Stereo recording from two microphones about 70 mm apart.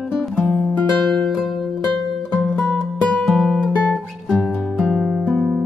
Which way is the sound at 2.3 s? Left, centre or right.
Left.